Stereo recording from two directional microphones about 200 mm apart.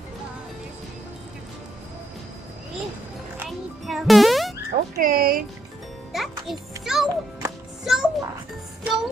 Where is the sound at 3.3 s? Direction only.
5° right (ahead or behind).